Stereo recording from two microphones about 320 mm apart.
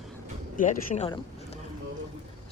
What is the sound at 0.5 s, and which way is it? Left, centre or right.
Speech, left.